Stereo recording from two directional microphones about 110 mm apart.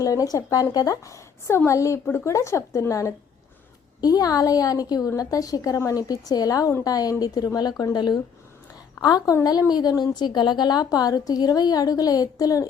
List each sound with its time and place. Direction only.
0.0 s a woman's voice: 30° left (ahead or behind)